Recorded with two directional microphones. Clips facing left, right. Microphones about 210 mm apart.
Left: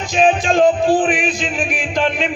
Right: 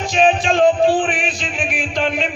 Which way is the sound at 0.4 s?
40° left (ahead or behind).